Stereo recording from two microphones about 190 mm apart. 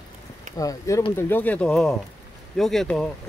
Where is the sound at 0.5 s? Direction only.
15° left (ahead or behind).